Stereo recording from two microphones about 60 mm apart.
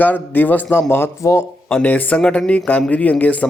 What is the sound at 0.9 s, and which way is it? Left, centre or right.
Speech, left.